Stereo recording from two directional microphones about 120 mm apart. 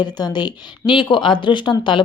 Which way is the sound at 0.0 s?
35° left (ahead or behind).